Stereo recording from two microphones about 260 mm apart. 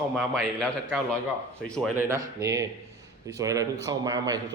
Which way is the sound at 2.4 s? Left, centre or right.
Centre.